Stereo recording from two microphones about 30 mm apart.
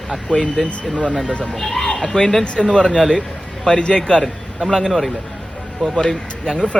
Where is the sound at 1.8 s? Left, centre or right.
Left.